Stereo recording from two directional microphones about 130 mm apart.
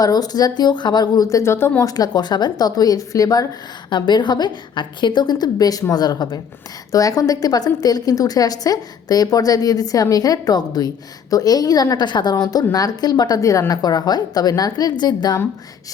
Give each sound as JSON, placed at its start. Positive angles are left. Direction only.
{"t": 0.0, "sound": "a woman's voice", "side_deg": 30}